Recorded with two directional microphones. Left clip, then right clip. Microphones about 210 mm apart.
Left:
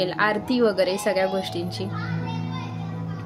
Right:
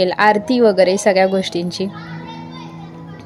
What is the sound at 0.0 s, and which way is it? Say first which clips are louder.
A woman's voice: right 9 dB; 30° right (ahead or behind).